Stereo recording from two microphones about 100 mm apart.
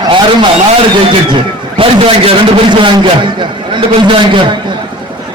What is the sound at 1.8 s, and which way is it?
A man's voice, 65° right (ahead or behind).